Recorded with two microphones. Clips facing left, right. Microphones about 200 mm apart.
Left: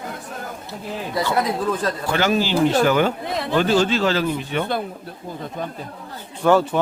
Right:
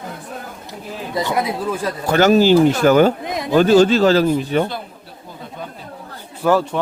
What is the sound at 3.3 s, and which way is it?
Speech, 15° right (ahead or behind).